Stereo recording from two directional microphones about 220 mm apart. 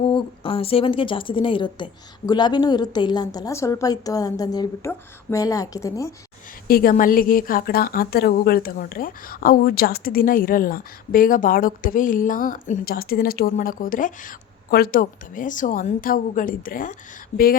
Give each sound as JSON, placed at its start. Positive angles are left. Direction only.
{"t": 0.1, "sound": "a woman's voice", "side_deg": 25}
{"t": 6.7, "sound": "a woman's voice", "side_deg": 40}